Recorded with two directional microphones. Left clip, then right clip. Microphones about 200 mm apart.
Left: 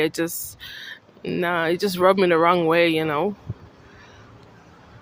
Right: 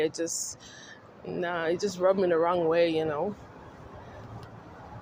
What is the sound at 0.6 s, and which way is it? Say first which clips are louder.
Speech: left 10 dB; 50° left (ahead or behind).